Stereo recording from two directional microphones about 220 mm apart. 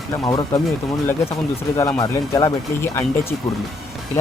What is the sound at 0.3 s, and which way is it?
Speech, 15° left (ahead or behind).